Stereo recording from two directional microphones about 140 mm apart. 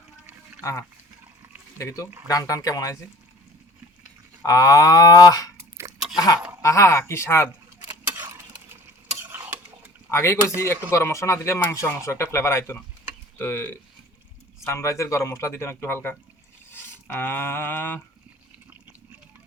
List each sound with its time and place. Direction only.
0.6 s speech: 20° left (ahead or behind)
4.4 s speech: 25° left (ahead or behind)
5.5 s chewing: 20° right (ahead or behind)
6.1 s speech: 25° left (ahead or behind)
7.8 s a sound: 30° right (ahead or behind)
9.3 s stir: 15° right (ahead or behind)
10.1 s speech: 20° left (ahead or behind)
13.4 s a sound: 15° left (ahead or behind)
14.6 s speech: 20° left (ahead or behind)
17.1 s a sound: 15° left (ahead or behind)